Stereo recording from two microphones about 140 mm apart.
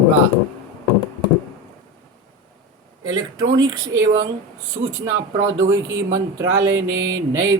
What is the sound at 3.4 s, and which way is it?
Speech, 30° right (ahead or behind).